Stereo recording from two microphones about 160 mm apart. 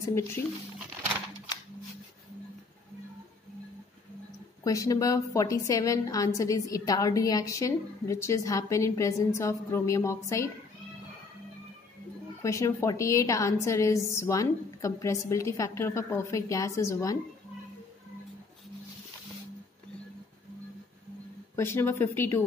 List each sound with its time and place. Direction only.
4.6 s a woman's voice: 20° left (ahead or behind)
12.4 s a woman's voice: 20° left (ahead or behind)
21.5 s speech: 15° left (ahead or behind)